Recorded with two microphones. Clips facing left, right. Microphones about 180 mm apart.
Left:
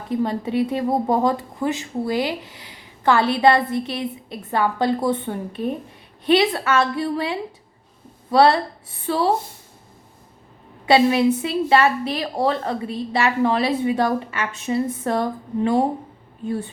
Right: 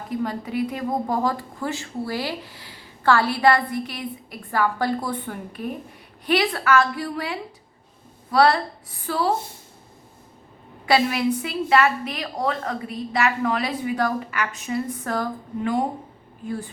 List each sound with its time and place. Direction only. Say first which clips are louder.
0.1 s speech: left 5 dB; 25° left (ahead or behind)
10.8 s speech: left 5 dB; 25° left (ahead or behind)